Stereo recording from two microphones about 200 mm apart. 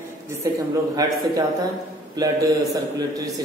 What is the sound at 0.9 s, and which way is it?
A man's voice, 20° right (ahead or behind).